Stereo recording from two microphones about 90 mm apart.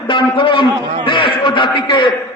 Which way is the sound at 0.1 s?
65° left (ahead or behind).